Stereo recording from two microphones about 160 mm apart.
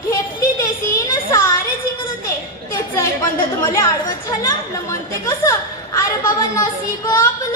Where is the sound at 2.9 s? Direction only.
15° left (ahead or behind).